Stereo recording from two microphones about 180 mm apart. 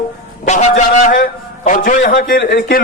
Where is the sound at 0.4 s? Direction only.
40° left (ahead or behind).